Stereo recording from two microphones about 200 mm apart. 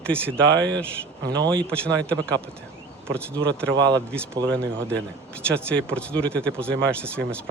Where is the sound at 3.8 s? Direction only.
5° left (ahead or behind).